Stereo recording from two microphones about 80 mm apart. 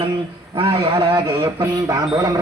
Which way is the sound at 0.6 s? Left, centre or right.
Right.